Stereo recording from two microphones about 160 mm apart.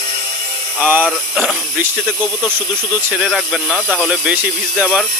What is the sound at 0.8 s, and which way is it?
Speech, 10° right (ahead or behind).